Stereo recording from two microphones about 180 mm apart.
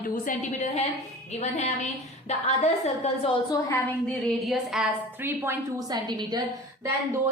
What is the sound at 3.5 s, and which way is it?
Speech, 20° left (ahead or behind).